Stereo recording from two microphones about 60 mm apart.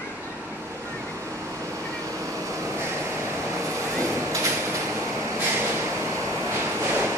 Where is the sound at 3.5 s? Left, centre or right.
Right.